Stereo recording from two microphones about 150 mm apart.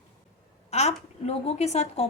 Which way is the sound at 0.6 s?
45° left (ahead or behind).